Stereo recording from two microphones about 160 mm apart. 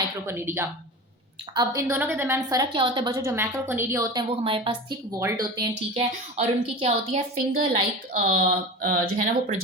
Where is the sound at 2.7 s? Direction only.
30° right (ahead or behind).